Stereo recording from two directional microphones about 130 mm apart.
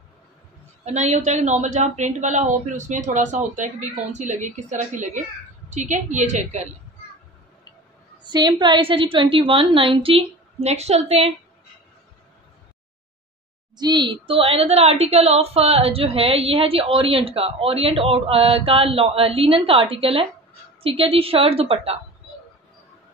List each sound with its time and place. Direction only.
0.8 s a woman's voice: 65° right (ahead or behind)
8.2 s a woman's voice: 35° right (ahead or behind); by 11.3 s 55° right (ahead or behind)
13.7 s a woman's voice: 35° right (ahead or behind)